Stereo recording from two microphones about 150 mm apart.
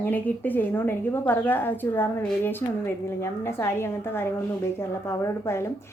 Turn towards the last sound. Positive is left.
turn(degrees=20)  # may be behind; listen again after turning